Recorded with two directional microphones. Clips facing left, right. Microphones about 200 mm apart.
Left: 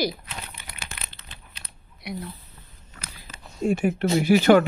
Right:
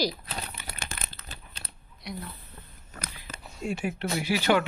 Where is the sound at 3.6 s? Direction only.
50° left (ahead or behind).